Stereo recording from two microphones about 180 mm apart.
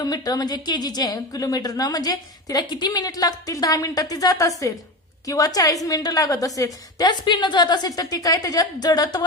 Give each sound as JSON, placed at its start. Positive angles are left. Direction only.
{"t": 0.0, "sound": "a woman's voice", "side_deg": 20}